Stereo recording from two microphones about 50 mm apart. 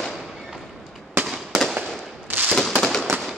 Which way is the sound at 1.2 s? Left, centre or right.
Right.